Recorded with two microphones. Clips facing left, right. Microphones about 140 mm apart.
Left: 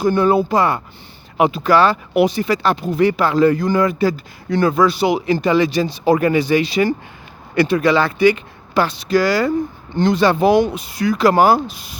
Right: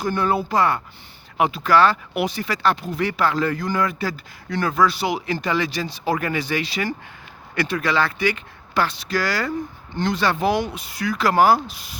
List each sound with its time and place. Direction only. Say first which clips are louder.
0.0 s speech: left 7 dB; 20° left (ahead or behind)